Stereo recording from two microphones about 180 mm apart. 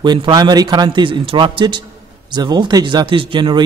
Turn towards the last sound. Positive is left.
turn(degrees=-25)  # may be behind; listen again after turning